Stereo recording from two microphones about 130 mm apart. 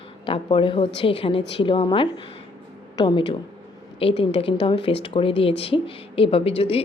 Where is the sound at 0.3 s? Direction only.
40° left (ahead or behind).